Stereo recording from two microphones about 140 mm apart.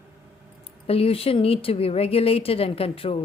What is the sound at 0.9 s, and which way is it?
A woman's voice, 45° left (ahead or behind).